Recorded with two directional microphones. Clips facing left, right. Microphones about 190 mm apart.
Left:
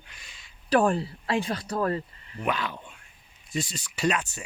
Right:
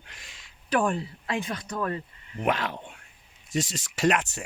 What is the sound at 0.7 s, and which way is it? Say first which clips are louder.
Speech: left 3 dB; 35° left (ahead or behind).